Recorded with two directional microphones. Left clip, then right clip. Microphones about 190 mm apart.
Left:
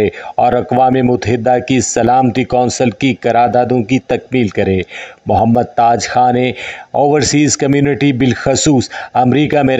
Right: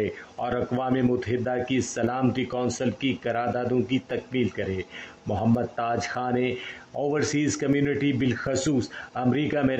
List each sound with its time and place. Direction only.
0.0 s speech: 40° left (ahead or behind)